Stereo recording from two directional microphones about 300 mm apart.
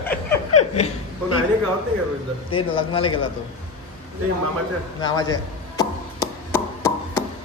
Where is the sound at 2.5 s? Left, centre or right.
Centre.